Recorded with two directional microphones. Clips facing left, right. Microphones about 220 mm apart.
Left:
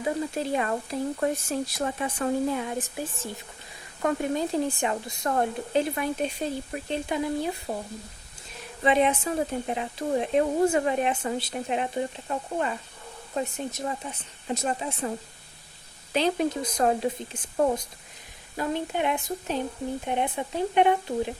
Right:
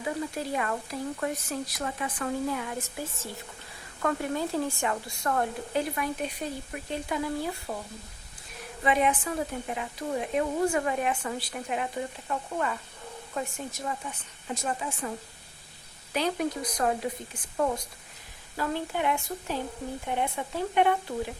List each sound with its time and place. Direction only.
0.3 s speech: 25° left (ahead or behind)
8.8 s speech: 25° left (ahead or behind)
16.1 s speech: 25° left (ahead or behind)
18.5 s speech: 20° left (ahead or behind)